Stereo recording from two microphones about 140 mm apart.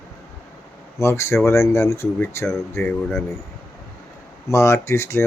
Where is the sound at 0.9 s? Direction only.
20° left (ahead or behind).